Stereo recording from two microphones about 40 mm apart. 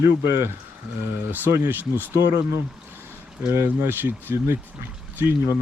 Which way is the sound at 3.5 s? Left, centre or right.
Right.